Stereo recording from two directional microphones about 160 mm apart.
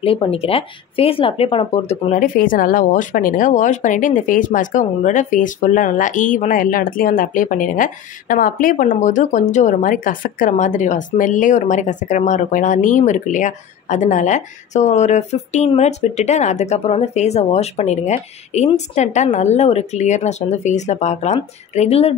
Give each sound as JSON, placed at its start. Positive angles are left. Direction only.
{"t": 0.0, "sound": "speech", "side_deg": 35}